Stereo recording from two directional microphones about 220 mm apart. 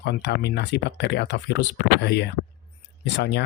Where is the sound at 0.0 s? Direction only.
50° left (ahead or behind).